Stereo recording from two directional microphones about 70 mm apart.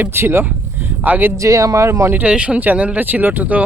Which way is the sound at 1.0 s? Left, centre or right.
Right.